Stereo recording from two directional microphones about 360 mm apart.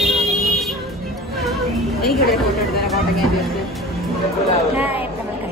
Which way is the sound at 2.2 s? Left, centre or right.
Left.